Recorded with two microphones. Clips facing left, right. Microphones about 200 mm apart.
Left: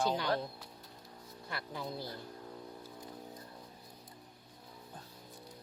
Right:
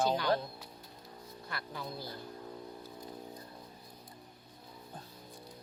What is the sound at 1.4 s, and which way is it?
Speech, 20° left (ahead or behind).